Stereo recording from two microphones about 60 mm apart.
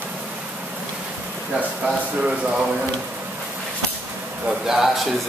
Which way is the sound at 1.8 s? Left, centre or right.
Centre.